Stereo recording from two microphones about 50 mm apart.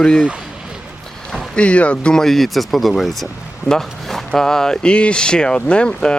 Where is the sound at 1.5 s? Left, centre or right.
Left.